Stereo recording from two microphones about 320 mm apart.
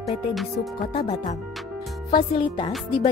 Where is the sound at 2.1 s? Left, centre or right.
Centre.